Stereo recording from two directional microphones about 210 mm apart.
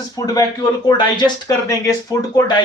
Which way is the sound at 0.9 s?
20° left (ahead or behind).